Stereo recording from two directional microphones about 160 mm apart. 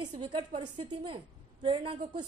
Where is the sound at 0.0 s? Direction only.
30° right (ahead or behind).